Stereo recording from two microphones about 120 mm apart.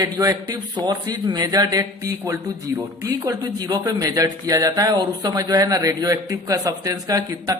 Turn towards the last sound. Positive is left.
turn(degrees=-30)  # may be behind; listen again after turning